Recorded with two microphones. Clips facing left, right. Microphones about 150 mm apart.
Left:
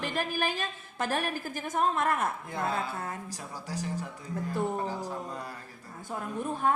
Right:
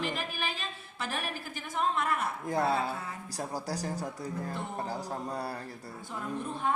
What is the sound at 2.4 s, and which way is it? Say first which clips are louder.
Speech: right 3 dB; 40° right (ahead or behind).